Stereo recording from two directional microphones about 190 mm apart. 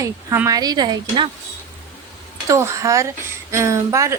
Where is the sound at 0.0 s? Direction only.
15° right (ahead or behind).